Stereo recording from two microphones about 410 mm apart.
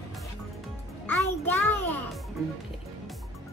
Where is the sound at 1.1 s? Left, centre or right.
Centre.